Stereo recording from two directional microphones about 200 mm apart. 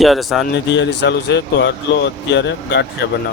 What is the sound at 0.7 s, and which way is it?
Speech, 60° left (ahead or behind).